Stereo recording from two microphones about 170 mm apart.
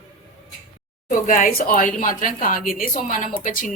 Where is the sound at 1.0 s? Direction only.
50° left (ahead or behind).